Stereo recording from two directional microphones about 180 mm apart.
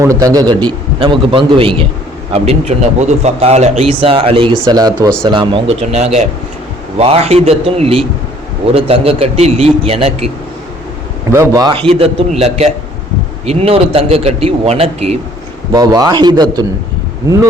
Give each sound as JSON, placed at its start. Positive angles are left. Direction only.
{"t": 0.0, "sound": "a man's voice", "side_deg": -15}
{"t": 11.3, "sound": "a man's voice", "side_deg": -15}
{"t": 15.7, "sound": "a man's voice", "side_deg": -20}